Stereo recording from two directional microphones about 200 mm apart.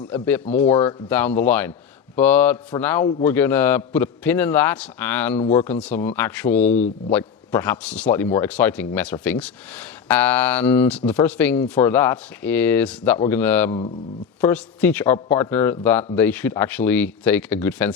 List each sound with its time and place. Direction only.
0.0 s a man's voice: 10° left (ahead or behind)
0.6 s speech: 30° left (ahead or behind)
1.1 s a man's voice: 10° left (ahead or behind)